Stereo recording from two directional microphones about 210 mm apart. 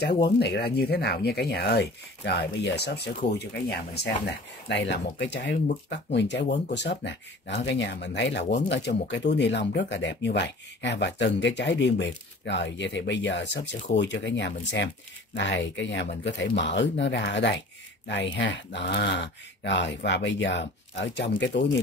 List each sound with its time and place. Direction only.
0.2 s speech: 50° left (ahead or behind)